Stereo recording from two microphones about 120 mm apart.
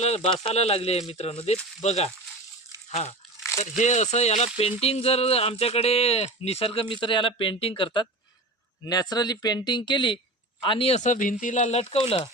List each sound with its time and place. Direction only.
0.0 s a sound: 65° left (ahead or behind)
0.4 s speech: 60° left (ahead or behind)
3.6 s speech: 75° left (ahead or behind); by 8.0 s 45° left (ahead or behind)
8.9 s speech: 35° left (ahead or behind)
10.9 s speech: 90° left
11.6 s speech: 60° left (ahead or behind)